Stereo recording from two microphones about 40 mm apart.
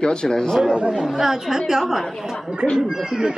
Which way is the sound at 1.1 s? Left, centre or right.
Centre.